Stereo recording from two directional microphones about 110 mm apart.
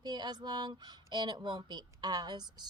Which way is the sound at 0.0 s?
40° right (ahead or behind).